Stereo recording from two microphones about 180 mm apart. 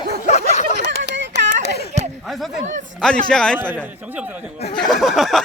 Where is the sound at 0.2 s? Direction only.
40° left (ahead or behind).